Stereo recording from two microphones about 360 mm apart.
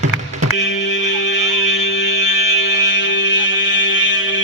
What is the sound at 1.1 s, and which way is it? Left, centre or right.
Music, left.